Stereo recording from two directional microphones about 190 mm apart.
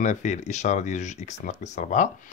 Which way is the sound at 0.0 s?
40° left (ahead or behind).